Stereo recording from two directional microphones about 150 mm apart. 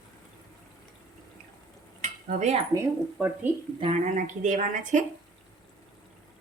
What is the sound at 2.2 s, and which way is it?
Cutlery, 50° right (ahead or behind).